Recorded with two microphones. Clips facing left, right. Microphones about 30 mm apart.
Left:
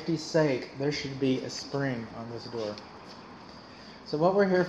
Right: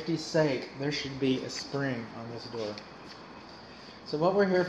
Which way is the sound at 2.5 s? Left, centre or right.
Centre.